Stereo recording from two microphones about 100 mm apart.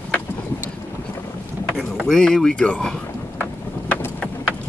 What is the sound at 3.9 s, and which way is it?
Vehicle, 15° left (ahead or behind).